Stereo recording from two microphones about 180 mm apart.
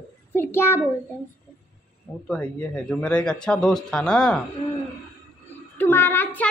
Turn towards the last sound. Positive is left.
turn(degrees=10)  # may be behind; listen again after turning